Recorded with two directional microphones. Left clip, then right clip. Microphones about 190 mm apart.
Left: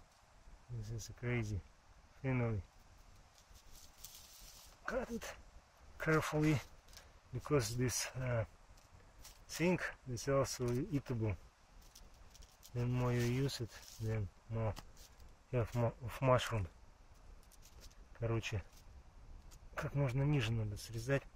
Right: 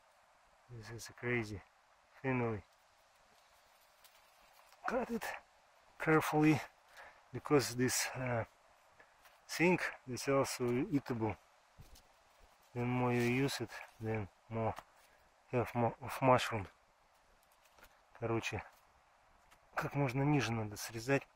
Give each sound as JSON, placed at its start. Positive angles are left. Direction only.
{"t": 0.7, "sound": "speech", "side_deg": -35}
{"t": 4.8, "sound": "speech", "side_deg": -30}
{"t": 9.5, "sound": "speech", "side_deg": -25}
{"t": 12.7, "sound": "speech", "side_deg": -30}
{"t": 18.2, "sound": "speech", "side_deg": -25}
{"t": 19.7, "sound": "speech", "side_deg": -30}